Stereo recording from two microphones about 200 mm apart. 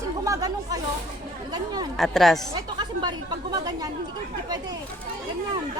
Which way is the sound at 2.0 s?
Centre (ahead or behind).